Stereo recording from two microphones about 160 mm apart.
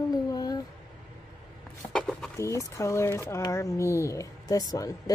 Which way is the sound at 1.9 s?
5° left (ahead or behind).